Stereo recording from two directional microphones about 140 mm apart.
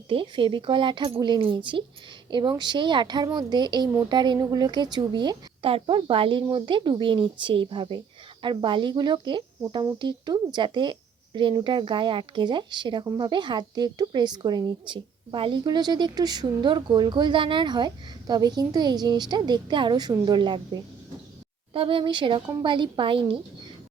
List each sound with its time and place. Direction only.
0.1 s speech: 35° right (ahead or behind)